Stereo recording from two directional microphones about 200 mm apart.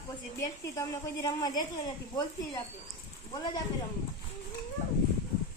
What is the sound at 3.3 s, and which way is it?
Speech, 20° left (ahead or behind).